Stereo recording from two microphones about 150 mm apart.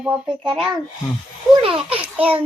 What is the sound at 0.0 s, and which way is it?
Speech, 5° right (ahead or behind).